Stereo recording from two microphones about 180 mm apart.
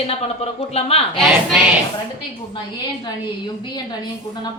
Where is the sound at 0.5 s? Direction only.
35° left (ahead or behind).